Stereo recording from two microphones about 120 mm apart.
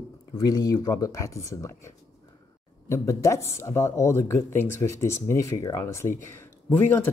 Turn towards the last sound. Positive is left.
turn(degrees=15)  # may be behind; listen again after turning